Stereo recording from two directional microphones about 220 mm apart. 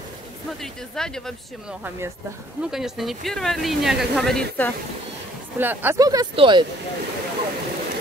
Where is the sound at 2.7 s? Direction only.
Centre (ahead or behind).